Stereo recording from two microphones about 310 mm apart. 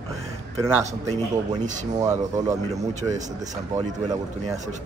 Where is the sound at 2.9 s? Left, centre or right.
Right.